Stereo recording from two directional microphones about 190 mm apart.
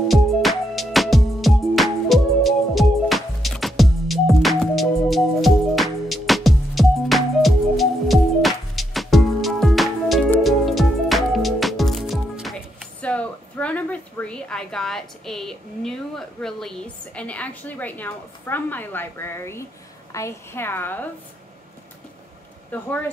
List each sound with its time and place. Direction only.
0.1 s music: centre (ahead or behind)
13.0 s a sound: 5° left (ahead or behind)
20.1 s a woman's voice: 15° left (ahead or behind)